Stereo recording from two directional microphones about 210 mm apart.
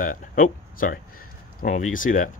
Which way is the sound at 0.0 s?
40° left (ahead or behind).